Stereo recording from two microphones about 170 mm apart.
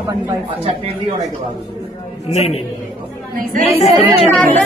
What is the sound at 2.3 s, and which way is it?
Speech, 35° left (ahead or behind).